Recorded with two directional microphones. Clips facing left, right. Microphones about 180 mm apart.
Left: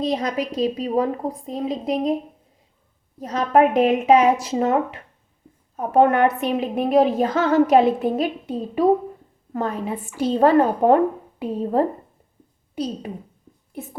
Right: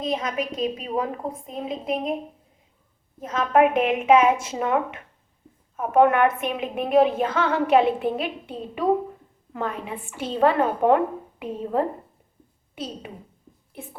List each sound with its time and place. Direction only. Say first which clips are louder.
0.0 s a woman's voice: left 3 dB; 35° left (ahead or behind)
3.2 s a woman's voice: left 2 dB; 35° left (ahead or behind)